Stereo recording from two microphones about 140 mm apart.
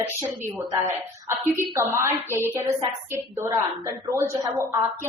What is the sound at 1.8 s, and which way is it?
A woman's voice, 20° right (ahead or behind).